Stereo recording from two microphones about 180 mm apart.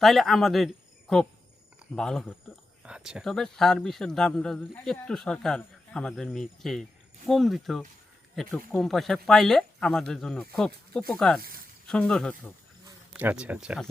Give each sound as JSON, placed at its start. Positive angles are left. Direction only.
{"t": 0.0, "sound": "speech", "side_deg": 0}
{"t": 13.1, "sound": "speech", "side_deg": -5}